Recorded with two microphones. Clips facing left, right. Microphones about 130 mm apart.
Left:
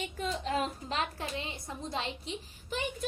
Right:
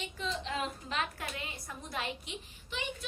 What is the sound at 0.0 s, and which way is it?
A woman's voice, 45° left (ahead or behind).